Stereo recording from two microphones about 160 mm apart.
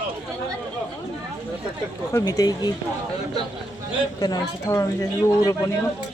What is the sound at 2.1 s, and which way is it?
Speech, 20° left (ahead or behind).